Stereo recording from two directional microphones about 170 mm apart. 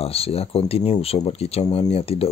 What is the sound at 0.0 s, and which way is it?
Speech, 35° left (ahead or behind).